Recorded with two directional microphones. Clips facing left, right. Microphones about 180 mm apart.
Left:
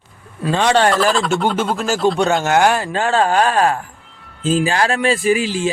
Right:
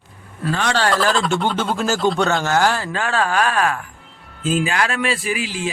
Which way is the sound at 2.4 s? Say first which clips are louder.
Left 4 dB; 20° left (ahead or behind).